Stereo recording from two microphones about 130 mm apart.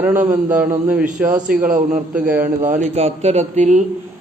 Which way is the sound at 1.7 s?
90° right.